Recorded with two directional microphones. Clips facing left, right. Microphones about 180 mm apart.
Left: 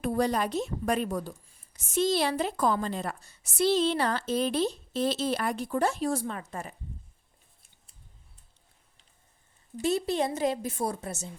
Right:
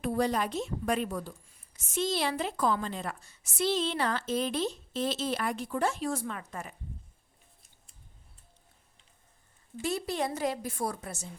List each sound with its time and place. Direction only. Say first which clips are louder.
0.0 s a woman's voice: left 2 dB; 40° left (ahead or behind)
9.8 s a woman's voice: left 5 dB; 25° left (ahead or behind)